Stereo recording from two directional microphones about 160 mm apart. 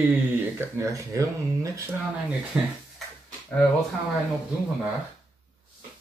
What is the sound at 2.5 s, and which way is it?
Speech, 10° right (ahead or behind).